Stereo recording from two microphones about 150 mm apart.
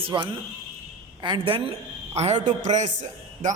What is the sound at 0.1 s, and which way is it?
A woman's voice, 25° right (ahead or behind).